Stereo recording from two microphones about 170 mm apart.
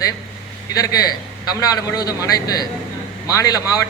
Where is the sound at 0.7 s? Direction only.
20° left (ahead or behind).